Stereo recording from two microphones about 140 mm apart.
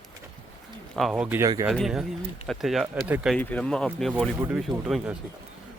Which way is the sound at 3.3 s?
10° left (ahead or behind).